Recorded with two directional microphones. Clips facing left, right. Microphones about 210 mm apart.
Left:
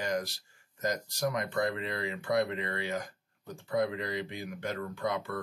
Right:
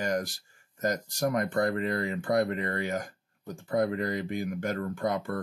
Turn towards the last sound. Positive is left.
turn(degrees=-45)  # may be behind; listen again after turning